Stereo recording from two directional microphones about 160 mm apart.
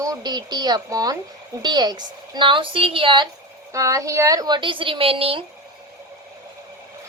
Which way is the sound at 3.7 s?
20° right (ahead or behind).